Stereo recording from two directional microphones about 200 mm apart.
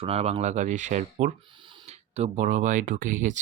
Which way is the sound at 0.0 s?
30° right (ahead or behind).